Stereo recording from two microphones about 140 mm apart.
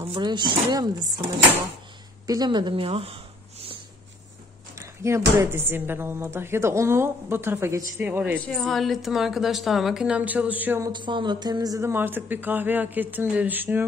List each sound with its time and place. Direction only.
0.1 s speech: 30° right (ahead or behind)
2.2 s speech: 30° right (ahead or behind)
4.7 s speech: 20° right (ahead or behind)
8.5 s a woman's voice: centre (ahead or behind)
10.8 s speech: 35° right (ahead or behind); by 13.8 s 15° right (ahead or behind)